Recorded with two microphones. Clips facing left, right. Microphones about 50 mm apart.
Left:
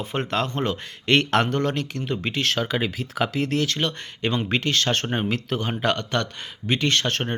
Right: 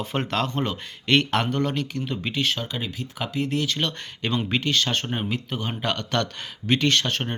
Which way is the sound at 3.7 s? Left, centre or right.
Left.